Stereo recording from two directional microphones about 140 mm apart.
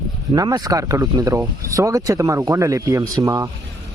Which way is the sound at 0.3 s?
30° right (ahead or behind).